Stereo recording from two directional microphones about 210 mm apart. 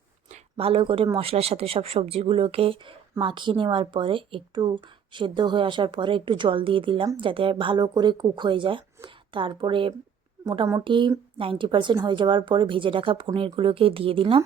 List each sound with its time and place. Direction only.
0.3 s speech: 25° right (ahead or behind)